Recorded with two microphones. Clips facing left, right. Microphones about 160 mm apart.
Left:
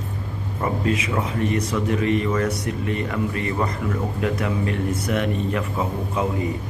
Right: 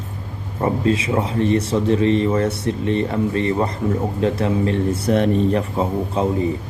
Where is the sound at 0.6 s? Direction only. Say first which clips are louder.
Right 5 dB; 30° right (ahead or behind).